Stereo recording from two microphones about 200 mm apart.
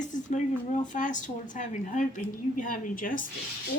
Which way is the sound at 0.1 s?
40° left (ahead or behind).